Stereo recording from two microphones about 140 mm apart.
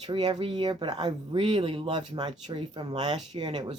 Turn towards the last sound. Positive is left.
turn(degrees=-35)  # may be behind; listen again after turning